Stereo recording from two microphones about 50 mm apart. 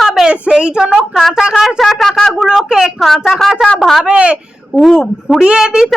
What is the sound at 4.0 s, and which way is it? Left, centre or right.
Speech, centre.